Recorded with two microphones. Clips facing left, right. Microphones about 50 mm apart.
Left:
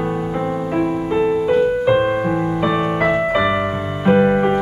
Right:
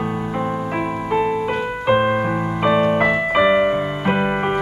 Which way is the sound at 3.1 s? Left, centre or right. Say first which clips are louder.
Right 1 dB; centre.